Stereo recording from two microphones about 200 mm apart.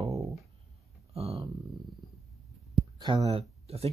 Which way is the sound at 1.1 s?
30° right (ahead or behind).